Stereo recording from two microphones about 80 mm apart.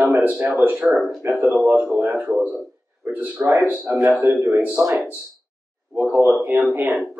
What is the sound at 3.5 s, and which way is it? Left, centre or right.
Speech, right.